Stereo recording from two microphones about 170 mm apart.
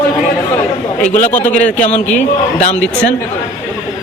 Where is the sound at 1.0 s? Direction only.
50° left (ahead or behind).